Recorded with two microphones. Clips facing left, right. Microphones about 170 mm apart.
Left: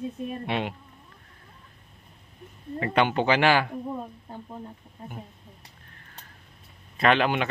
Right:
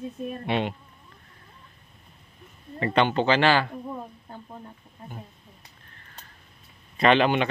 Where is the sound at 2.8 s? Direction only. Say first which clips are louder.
Right 1 dB; 10° left (ahead or behind).